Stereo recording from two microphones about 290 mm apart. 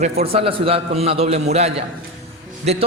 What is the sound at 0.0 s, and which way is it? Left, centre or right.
A man's voice, right.